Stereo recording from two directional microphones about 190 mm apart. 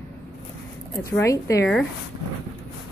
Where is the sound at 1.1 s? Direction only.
15° left (ahead or behind).